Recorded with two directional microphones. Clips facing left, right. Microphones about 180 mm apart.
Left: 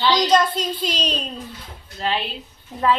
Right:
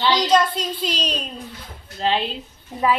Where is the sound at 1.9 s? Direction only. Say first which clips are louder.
Right 3 dB; 25° right (ahead or behind).